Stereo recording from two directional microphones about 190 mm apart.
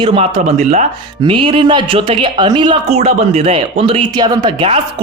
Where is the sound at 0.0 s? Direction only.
30° right (ahead or behind).